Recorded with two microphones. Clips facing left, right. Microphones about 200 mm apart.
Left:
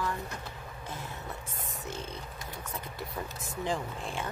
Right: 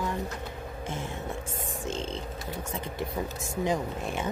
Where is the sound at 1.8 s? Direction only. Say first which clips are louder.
Right 6 dB; 25° right (ahead or behind).